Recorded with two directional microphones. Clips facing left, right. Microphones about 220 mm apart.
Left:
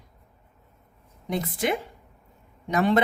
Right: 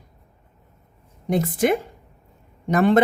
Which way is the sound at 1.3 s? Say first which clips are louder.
Right 7 dB; 45° right (ahead or behind).